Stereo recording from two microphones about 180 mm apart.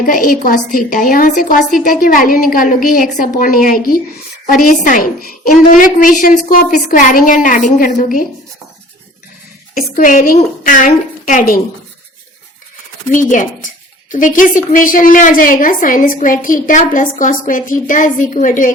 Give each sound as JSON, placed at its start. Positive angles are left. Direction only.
{"t": 0.0, "sound": "a woman's voice", "side_deg": 50}
{"t": 9.9, "sound": "a woman's voice", "side_deg": 45}
{"t": 13.1, "sound": "a woman's voice", "side_deg": 45}